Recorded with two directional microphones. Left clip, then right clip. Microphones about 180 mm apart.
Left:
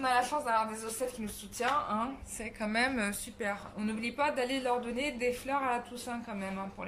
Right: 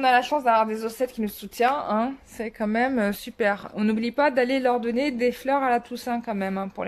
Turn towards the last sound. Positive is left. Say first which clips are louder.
# right 11 dB
turn(degrees=-55)  # may be behind; listen again after turning